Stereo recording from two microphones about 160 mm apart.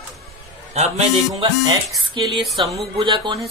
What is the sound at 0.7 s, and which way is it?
Speech, 45° right (ahead or behind).